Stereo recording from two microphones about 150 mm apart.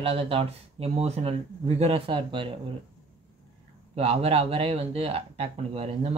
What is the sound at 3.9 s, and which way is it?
Speech, 40° right (ahead or behind).